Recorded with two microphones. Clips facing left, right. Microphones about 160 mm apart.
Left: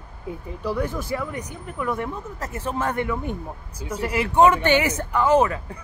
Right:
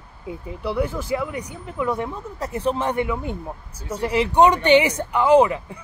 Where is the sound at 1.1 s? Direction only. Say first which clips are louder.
Right 3 dB; 10° right (ahead or behind).